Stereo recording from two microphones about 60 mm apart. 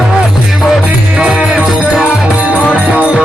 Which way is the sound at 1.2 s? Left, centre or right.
Centre.